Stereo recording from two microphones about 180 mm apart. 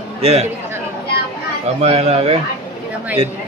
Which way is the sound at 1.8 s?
35° right (ahead or behind).